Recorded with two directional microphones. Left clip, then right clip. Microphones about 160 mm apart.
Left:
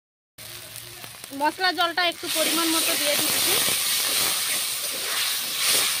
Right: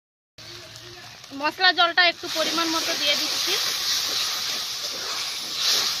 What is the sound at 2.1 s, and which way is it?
Speech, 30° left (ahead or behind).